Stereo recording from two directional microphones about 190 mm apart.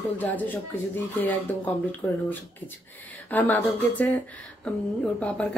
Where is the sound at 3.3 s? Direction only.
10° left (ahead or behind).